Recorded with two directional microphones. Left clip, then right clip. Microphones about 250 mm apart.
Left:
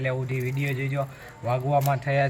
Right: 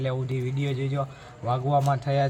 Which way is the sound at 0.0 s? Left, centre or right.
Centre.